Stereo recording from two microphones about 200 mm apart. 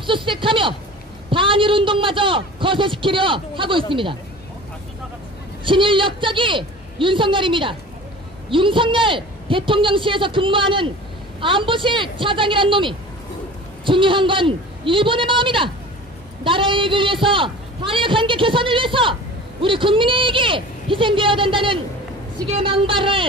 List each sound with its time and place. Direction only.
0.0 s a man's voice: 25° right (ahead or behind)
5.7 s a man's voice: 25° right (ahead or behind)